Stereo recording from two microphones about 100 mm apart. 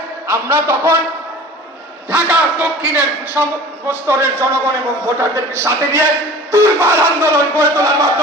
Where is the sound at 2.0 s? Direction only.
15° right (ahead or behind); by 8.1 s 30° right (ahead or behind).